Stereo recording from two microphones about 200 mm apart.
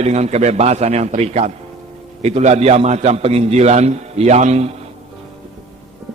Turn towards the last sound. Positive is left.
turn(degrees=-35)  # may be behind; listen again after turning